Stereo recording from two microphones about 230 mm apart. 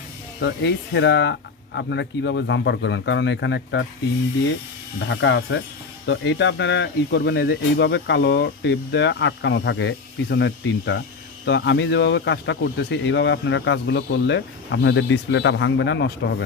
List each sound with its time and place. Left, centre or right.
0.4 s speech: left
4.9 s speech: left